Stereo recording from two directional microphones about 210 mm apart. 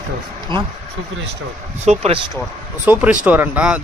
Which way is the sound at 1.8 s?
30° right (ahead or behind).